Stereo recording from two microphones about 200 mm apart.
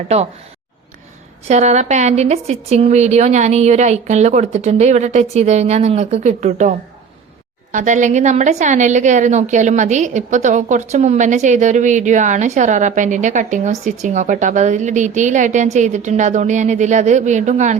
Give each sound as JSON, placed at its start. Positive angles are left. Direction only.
{"t": 1.5, "sound": "a woman's voice", "side_deg": -35}